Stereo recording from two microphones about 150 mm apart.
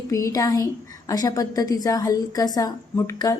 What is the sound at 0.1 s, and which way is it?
A woman's voice, 20° left (ahead or behind).